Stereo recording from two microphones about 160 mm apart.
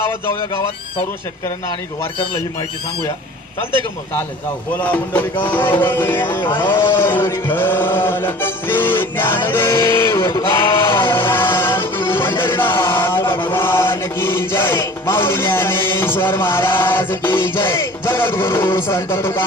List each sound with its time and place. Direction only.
4.8 s chant: 10° left (ahead or behind)
11.1 s music: 15° left (ahead or behind)